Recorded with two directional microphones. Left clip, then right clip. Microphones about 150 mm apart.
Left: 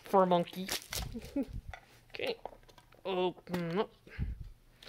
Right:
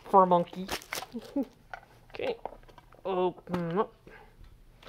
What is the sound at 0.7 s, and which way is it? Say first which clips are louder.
Crumpling: right 3 dB; 10° right (ahead or behind).